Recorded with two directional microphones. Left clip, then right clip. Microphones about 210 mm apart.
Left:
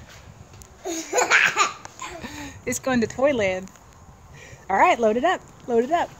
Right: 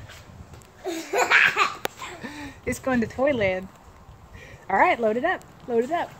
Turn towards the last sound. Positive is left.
turn(degrees=20)  # may be behind; listen again after turning